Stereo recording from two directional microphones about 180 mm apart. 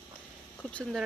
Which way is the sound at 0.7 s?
5° left (ahead or behind).